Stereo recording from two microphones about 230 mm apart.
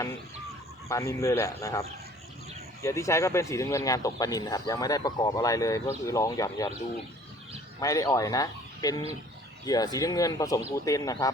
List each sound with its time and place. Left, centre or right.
0.9 s speech: centre
2.8 s speech: centre
7.8 s speech: centre